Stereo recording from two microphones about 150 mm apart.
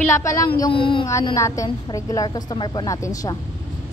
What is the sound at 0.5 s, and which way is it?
Child singing, 35° left (ahead or behind).